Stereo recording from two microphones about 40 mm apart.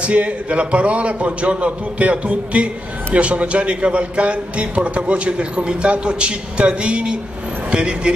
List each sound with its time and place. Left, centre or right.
0.0 s a man's voice: right